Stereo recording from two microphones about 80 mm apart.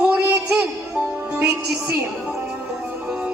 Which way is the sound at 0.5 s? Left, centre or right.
Centre.